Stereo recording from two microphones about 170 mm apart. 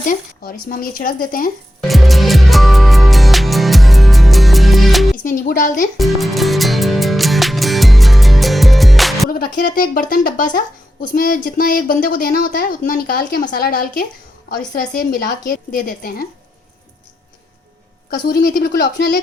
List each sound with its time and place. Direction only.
0.0 s speech: 50° left (ahead or behind)
1.9 s music: centre (ahead or behind)
5.1 s a woman's voice: 55° left (ahead or behind)
6.0 s music: centre (ahead or behind)
9.4 s speech: 55° left (ahead or behind)
14.5 s speech: 65° left (ahead or behind)
18.1 s speech: 60° left (ahead or behind); by 19.2 s 75° left (ahead or behind)